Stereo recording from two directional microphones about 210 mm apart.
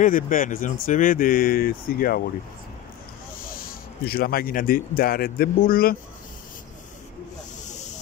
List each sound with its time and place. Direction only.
0.0 s speech: 40° left (ahead or behind)
3.4 s speech: 45° left (ahead or behind)
7.6 s snake: 35° left (ahead or behind)